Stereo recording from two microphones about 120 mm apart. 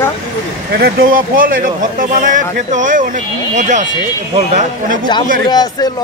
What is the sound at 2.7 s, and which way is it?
Speech, 90° right.